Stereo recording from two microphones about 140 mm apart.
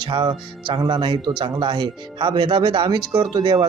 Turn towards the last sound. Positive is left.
turn(degrees=-35)  # may be behind; listen again after turning